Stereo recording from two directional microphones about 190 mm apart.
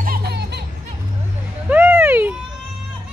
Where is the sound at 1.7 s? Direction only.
10° right (ahead or behind).